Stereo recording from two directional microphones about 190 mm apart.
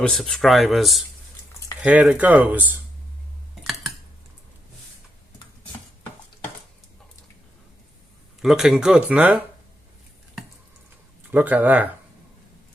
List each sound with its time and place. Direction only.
0.0 s speech: centre (ahead or behind)
3.6 s a sound: centre (ahead or behind)
8.4 s speech: centre (ahead or behind)
11.3 s speech: 10° right (ahead or behind)